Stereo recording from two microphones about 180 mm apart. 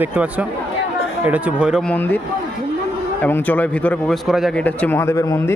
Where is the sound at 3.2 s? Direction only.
10° left (ahead or behind).